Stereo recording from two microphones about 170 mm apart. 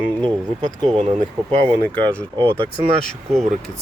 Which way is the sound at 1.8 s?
10° left (ahead or behind).